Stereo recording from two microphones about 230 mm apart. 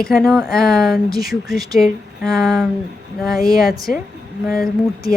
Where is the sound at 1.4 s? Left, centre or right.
Centre.